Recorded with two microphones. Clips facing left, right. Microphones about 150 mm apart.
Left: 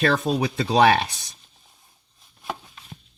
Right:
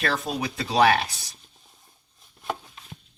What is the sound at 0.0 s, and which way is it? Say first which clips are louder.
Speech: left 6 dB; 45° left (ahead or behind).